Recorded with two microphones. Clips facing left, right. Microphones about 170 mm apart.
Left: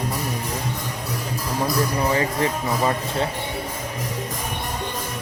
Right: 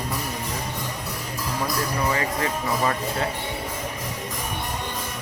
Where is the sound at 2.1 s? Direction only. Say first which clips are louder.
Left 3 dB; 30° left (ahead or behind).